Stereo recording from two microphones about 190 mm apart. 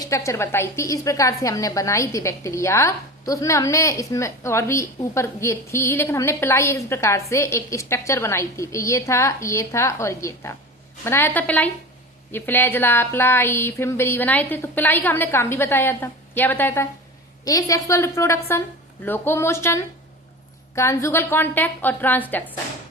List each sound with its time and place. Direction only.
0.0 s a woman's voice: 15° left (ahead or behind)